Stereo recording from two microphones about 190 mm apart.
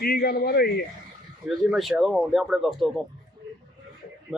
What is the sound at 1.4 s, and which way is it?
Speech, centre (ahead or behind).